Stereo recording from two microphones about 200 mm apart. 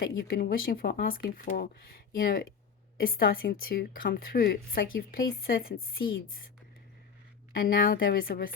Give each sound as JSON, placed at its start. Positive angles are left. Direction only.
{"t": 0.0, "sound": "speech", "side_deg": 50}
{"t": 7.5, "sound": "speech", "side_deg": 45}